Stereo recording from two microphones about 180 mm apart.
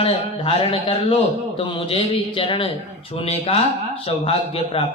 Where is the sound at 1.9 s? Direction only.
30° left (ahead or behind).